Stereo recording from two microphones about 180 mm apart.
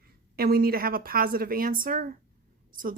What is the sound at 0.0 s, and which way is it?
A woman's voice, 55° right (ahead or behind).